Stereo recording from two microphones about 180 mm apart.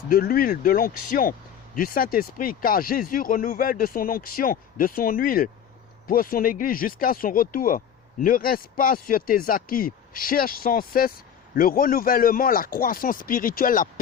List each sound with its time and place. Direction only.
0.1 s speech: 55° left (ahead or behind)